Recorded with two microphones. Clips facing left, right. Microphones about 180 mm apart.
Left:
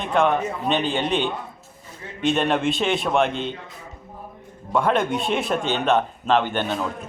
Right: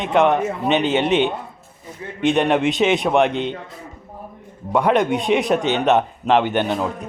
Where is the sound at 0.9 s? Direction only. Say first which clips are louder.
Right 6 dB; 75° right (ahead or behind).